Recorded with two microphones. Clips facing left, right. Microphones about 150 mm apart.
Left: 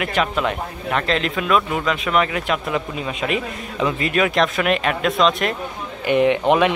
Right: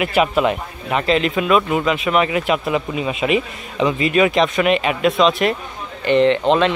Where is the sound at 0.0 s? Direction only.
10° right (ahead or behind).